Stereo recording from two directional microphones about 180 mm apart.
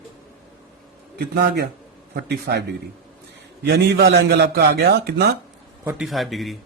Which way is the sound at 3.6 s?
65° right (ahead or behind).